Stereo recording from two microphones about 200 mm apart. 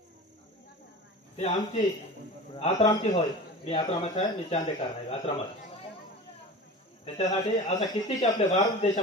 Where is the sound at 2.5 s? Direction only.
25° left (ahead or behind).